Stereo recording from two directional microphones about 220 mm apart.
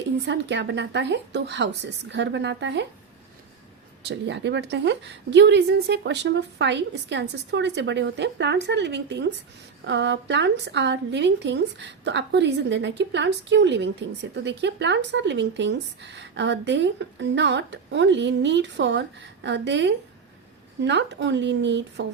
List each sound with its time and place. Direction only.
0.3 s a woman's voice: 55° right (ahead or behind)
4.0 s a woman's voice: 55° right (ahead or behind)